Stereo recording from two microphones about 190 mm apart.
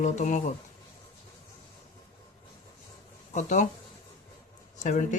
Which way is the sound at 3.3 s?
40° left (ahead or behind).